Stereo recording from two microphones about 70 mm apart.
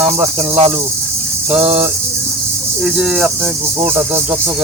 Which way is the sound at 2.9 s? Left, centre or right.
Centre.